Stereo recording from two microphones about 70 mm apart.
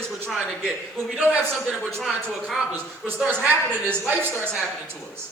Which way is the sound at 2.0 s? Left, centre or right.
Centre.